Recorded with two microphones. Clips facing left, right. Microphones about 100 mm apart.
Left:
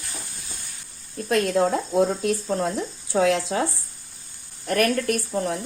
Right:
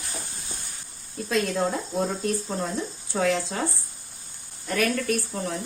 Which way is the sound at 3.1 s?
80° left.